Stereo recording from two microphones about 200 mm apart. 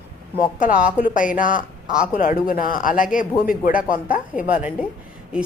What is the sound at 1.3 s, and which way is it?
A woman's voice, 40° left (ahead or behind).